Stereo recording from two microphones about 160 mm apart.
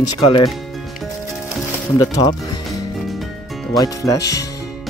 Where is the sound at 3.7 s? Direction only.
20° left (ahead or behind).